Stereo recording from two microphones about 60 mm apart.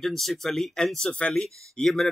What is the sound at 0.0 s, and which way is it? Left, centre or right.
Speech, centre.